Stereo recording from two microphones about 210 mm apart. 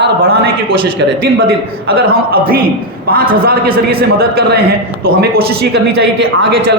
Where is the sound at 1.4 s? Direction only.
45° right (ahead or behind).